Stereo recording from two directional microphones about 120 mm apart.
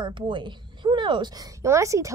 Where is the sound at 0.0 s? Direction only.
40° right (ahead or behind).